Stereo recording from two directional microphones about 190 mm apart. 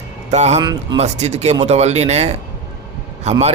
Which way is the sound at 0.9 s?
35° right (ahead or behind).